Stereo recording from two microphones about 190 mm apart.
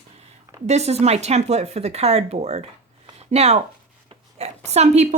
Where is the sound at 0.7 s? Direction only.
35° right (ahead or behind).